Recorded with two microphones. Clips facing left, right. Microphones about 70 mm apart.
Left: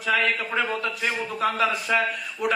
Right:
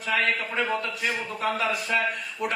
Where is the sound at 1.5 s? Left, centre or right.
Left.